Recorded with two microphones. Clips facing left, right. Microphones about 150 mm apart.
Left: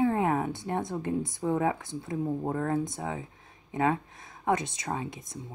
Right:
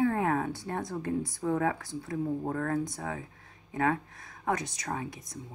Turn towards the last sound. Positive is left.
turn(degrees=25)  # may be behind; listen again after turning